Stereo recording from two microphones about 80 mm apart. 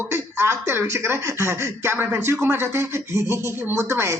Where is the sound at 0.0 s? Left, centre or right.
Right.